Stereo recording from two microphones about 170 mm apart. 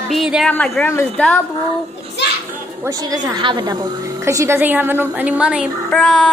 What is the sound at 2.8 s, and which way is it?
A woman's voice, 20° right (ahead or behind).